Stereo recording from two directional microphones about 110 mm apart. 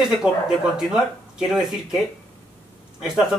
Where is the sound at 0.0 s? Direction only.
Centre (ahead or behind).